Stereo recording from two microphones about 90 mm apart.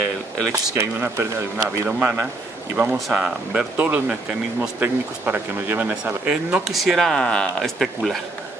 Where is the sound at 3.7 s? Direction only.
20° right (ahead or behind).